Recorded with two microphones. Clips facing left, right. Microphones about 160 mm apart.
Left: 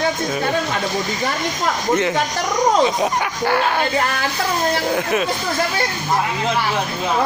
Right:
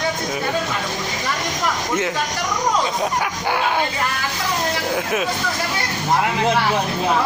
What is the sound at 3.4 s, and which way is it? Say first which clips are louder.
Speech: left 3 dB; 10° right (ahead or behind).